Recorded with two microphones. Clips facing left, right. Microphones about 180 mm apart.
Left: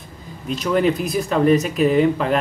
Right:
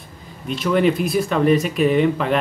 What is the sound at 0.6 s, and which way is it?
Speech, centre (ahead or behind).